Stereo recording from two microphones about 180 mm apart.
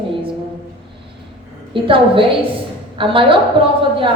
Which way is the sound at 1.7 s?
30° right (ahead or behind).